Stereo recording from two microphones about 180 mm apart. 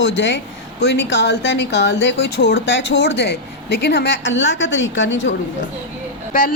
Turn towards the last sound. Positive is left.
turn(degrees=50)  # may be behind; listen again after turning